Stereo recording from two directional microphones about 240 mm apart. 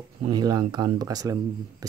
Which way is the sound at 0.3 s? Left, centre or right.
Centre.